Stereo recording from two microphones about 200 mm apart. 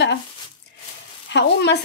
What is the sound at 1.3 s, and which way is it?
Speech, 60° left (ahead or behind).